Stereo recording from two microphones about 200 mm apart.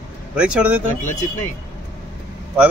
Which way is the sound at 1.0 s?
40° left (ahead or behind).